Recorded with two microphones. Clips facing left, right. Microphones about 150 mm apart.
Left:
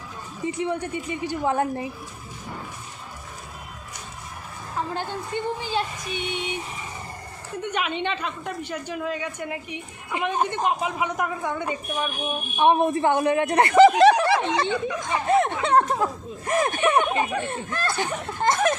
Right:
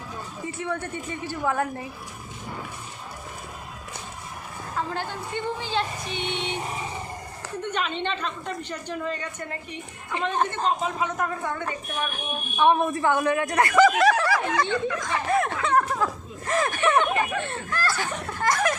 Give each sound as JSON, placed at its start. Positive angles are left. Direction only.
{"t": 0.4, "sound": "speech", "side_deg": 20}
{"t": 4.8, "sound": "a woman's voice", "side_deg": 15}
{"t": 7.6, "sound": "a woman's voice", "side_deg": 10}
{"t": 14.7, "sound": "a sound", "side_deg": 15}
{"t": 16.5, "sound": "speech", "side_deg": 20}